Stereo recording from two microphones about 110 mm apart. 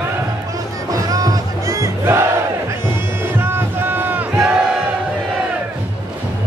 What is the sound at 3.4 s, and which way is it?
Battle cry, 20° right (ahead or behind).